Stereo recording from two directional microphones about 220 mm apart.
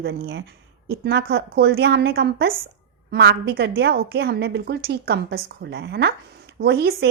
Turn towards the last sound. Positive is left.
turn(degrees=-50)  # may be behind; listen again after turning